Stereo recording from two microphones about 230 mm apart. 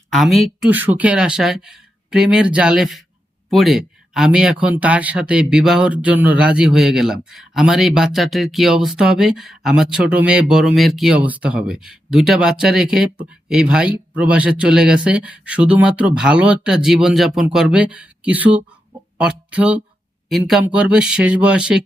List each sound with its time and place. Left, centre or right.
0.1 s speech: centre